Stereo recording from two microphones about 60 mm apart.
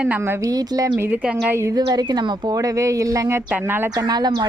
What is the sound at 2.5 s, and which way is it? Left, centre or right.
Speech, right.